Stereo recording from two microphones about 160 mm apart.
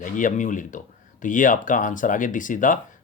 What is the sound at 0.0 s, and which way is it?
Speech, 55° left (ahead or behind).